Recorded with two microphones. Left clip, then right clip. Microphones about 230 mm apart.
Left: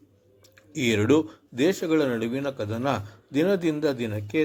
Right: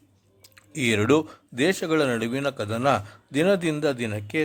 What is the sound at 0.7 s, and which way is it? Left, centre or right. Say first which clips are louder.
Speech: right 1 dB; right.